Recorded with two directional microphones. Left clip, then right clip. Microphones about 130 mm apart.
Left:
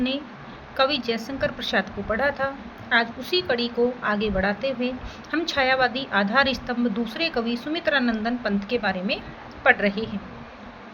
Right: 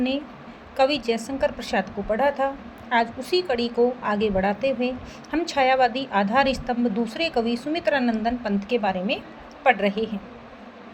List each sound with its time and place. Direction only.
0.8 s a woman's voice: 35° right (ahead or behind)